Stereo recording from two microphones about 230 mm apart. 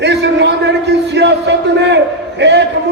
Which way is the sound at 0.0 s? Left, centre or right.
Right.